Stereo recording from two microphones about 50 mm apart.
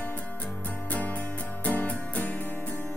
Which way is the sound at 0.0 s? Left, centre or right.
Left.